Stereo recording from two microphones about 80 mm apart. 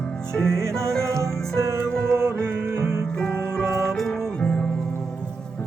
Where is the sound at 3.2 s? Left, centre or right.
Centre.